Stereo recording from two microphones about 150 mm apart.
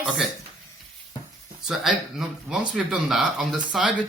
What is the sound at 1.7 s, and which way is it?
Speech, centre (ahead or behind).